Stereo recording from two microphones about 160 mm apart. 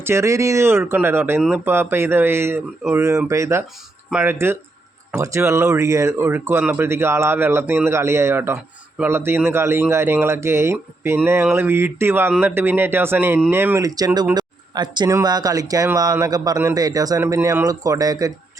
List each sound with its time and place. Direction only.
0.0 s a man's voice: 15° right (ahead or behind)